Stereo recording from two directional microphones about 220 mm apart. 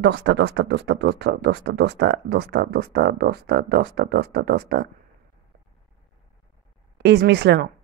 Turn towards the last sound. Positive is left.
turn(degrees=-50)  # may be behind; listen again after turning